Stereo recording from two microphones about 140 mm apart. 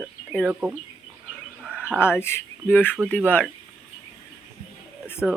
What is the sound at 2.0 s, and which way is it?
Speech, 15° left (ahead or behind).